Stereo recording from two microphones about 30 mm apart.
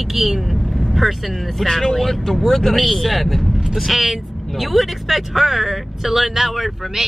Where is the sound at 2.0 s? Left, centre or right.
Centre.